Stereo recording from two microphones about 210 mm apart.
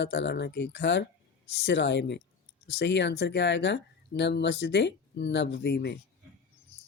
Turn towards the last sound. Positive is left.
turn(degrees=50)  # may be behind; listen again after turning